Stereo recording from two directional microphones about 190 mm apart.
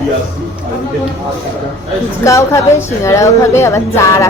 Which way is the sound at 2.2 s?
15° left (ahead or behind).